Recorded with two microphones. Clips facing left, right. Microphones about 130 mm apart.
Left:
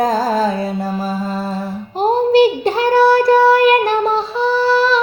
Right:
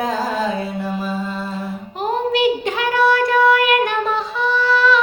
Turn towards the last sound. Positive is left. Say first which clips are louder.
# left 3 dB
turn(degrees=35)  # may be behind; listen again after turning